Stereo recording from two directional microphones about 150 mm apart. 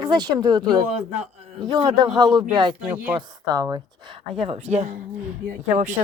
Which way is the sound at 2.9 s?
15° right (ahead or behind).